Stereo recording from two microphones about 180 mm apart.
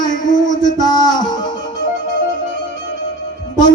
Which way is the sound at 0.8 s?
20° left (ahead or behind).